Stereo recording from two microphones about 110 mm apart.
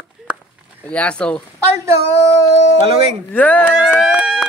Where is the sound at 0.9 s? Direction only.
10° left (ahead or behind).